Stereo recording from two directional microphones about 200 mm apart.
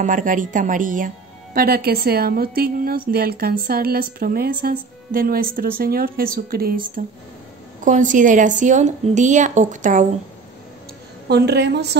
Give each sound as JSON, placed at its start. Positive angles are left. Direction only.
{"t": 0.0, "sound": "speech", "side_deg": -40}
{"t": 7.8, "sound": "a woman's voice", "side_deg": -40}
{"t": 11.2, "sound": "a woman's voice", "side_deg": -55}